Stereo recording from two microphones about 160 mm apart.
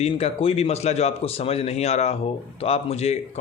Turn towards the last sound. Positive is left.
turn(degrees=40)  # may be behind; listen again after turning